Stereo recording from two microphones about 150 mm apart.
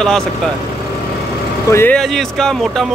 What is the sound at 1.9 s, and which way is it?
Speech, centre (ahead or behind).